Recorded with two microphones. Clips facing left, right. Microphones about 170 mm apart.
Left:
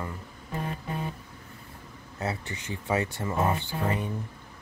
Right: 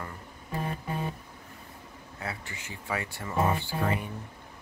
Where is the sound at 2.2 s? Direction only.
20° left (ahead or behind).